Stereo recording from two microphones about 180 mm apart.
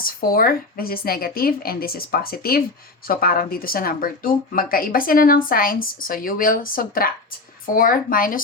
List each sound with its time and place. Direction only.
0.0 s speech: 55° left (ahead or behind)